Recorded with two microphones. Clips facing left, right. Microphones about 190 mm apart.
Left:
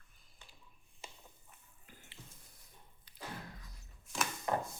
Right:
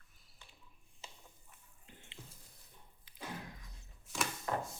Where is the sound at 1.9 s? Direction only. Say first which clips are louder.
Right 1 dB; 25° right (ahead or behind).